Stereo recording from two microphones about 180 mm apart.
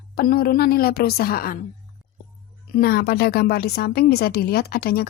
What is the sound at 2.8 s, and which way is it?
A woman's voice, 60° left (ahead or behind).